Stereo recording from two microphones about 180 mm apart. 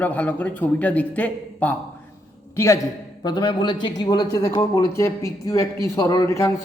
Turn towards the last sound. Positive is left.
turn(degrees=15)  # may be behind; listen again after turning